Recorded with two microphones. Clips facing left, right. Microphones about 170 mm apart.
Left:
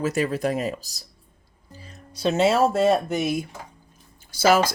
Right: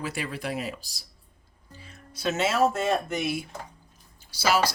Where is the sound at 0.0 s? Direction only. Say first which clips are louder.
Left 9 dB; 40° left (ahead or behind).